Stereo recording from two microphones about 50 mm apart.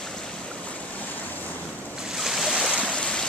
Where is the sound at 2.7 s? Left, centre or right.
Left.